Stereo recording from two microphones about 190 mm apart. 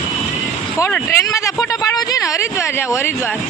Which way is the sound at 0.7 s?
15° left (ahead or behind).